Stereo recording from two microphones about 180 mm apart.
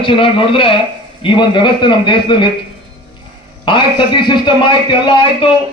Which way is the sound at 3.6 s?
25° left (ahead or behind).